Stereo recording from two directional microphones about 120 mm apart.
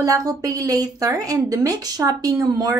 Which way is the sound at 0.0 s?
30° right (ahead or behind).